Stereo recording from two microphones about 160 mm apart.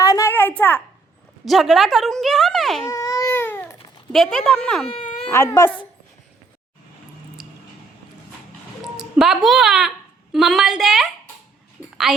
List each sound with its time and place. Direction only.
0.0 s a sound: 20° left (ahead or behind)
1.5 s a woman's voice: centre (ahead or behind)
2.9 s baby cry: 20° left (ahead or behind)
4.1 s a woman's voice: 5° left (ahead or behind)
5.3 s speech: 15° left (ahead or behind)
8.8 s a woman's voice: 5° right (ahead or behind)